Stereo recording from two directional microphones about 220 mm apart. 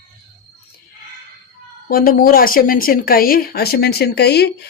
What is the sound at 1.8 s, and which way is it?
A woman's voice, 40° left (ahead or behind).